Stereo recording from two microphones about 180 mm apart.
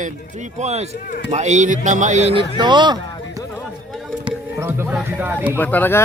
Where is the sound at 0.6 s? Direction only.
35° right (ahead or behind).